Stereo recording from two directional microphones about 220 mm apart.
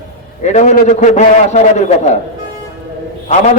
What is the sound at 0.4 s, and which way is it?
A man's voice, 30° left (ahead or behind).